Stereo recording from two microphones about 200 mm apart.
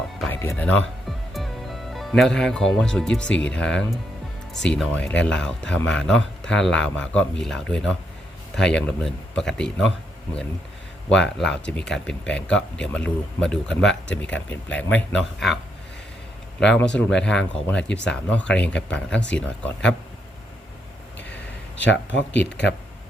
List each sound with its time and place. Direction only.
0.3 s speech: 10° left (ahead or behind)
11.1 s speech: 5° left (ahead or behind)
16.6 s speech: 5° left (ahead or behind)
16.9 s speech: 65° left (ahead or behind)
17.2 s speech: 5° left (ahead or behind)
21.8 s speech: 60° left (ahead or behind)